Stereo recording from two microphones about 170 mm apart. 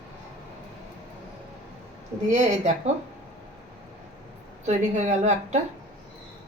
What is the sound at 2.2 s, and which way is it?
Speech, 45° right (ahead or behind).